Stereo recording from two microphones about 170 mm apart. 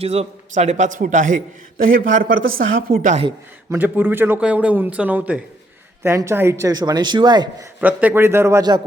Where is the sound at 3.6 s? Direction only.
10° right (ahead or behind).